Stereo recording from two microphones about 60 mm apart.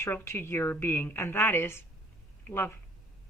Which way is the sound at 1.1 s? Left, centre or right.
Left.